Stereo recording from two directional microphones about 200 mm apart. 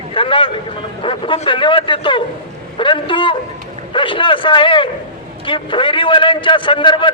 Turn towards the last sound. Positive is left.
turn(degrees=25)  # may be behind; listen again after turning